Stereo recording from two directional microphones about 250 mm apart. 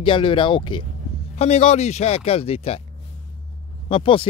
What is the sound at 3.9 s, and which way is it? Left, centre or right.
Speech, left.